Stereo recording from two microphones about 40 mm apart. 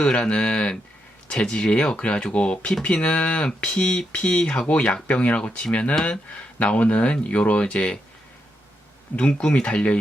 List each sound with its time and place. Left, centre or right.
0.0 s speech: left
9.1 s speech: left